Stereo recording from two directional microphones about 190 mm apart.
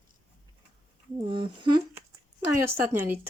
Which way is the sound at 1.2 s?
25° right (ahead or behind).